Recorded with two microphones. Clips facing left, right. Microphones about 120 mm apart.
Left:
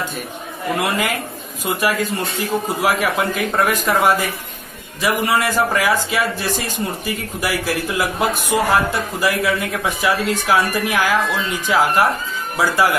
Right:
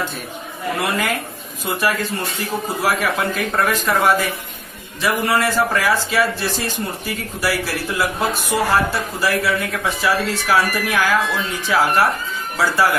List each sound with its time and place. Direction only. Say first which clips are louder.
0.7 s speech: left 1 dB; 15° left (ahead or behind)